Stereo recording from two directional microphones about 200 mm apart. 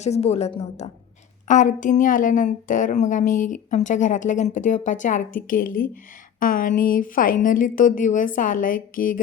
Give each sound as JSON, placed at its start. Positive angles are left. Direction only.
{"t": 0.0, "sound": "a woman's voice", "side_deg": 35}